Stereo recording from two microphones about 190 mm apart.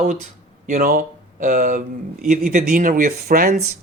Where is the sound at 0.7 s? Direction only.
50° right (ahead or behind).